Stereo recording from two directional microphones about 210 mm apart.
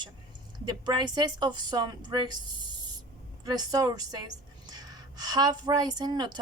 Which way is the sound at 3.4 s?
15° right (ahead or behind).